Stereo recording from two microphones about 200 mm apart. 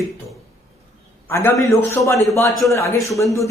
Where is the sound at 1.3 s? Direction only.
10° left (ahead or behind).